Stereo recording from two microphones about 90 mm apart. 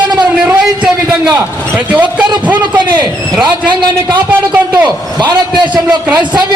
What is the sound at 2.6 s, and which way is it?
Speech, 55° right (ahead or behind).